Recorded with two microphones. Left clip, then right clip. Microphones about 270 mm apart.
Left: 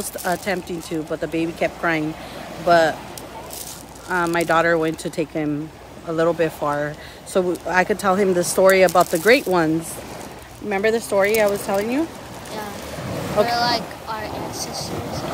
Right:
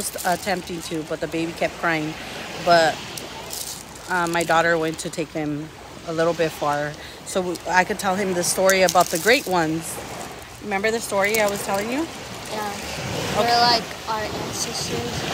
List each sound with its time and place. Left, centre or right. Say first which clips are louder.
0.2 s speech: even; centre
4.1 s speech: left 1 dB; centre
10.7 s speech: left 3 dB; centre
13.5 s speech: right 3 dB; centre